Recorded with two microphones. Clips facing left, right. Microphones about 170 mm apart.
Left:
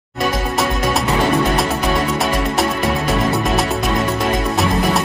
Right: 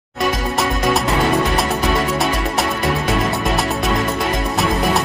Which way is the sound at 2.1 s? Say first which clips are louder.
Left 1 dB; centre (ahead or behind).